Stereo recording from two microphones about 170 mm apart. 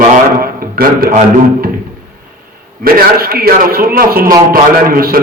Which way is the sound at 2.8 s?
60° right (ahead or behind).